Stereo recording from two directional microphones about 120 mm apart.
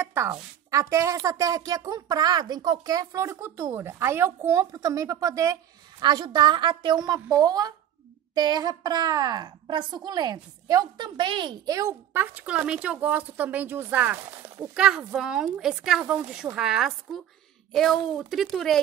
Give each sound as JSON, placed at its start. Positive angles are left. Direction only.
{"t": 0.0, "sound": "a woman's voice", "side_deg": -20}
{"t": 14.7, "sound": "a woman's voice", "side_deg": -5}